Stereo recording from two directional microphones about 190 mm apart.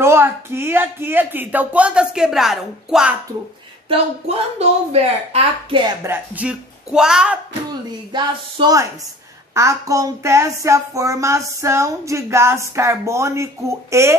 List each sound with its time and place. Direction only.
0.0 s speech: 15° right (ahead or behind)
3.9 s a woman's voice: 30° right (ahead or behind)
6.0 s speech: 10° right (ahead or behind)
8.1 s a sound: 25° right (ahead or behind)
9.5 s speech: 15° right (ahead or behind)